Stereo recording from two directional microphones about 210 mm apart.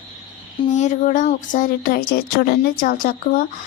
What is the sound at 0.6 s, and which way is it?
Speech, 35° left (ahead or behind).